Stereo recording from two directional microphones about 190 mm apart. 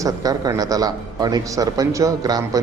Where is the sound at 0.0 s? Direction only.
20° right (ahead or behind).